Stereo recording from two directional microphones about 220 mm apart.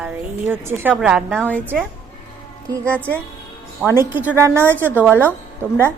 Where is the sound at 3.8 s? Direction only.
10° right (ahead or behind).